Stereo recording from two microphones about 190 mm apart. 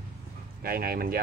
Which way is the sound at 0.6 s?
50° right (ahead or behind).